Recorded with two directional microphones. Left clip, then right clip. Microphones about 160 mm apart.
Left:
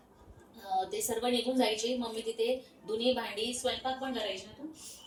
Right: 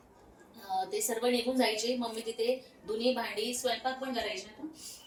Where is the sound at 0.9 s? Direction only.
10° left (ahead or behind).